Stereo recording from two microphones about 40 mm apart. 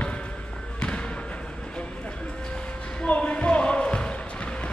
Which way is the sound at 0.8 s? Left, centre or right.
Left.